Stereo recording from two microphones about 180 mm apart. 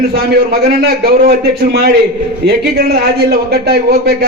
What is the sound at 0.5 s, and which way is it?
A man's voice, 60° right (ahead or behind).